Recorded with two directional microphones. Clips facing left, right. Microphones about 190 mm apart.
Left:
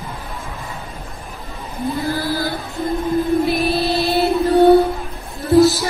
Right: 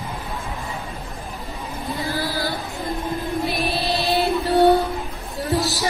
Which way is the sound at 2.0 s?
45° left (ahead or behind).